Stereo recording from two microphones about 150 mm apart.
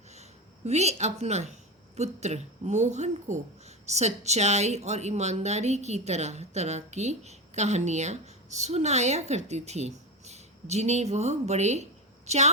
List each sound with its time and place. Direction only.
0.1 s speech: 45° right (ahead or behind)